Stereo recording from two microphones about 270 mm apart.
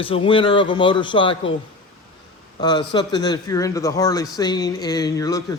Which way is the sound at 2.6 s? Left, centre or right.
Centre.